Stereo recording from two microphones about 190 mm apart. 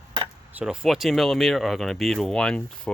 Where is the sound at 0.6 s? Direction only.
5° right (ahead or behind).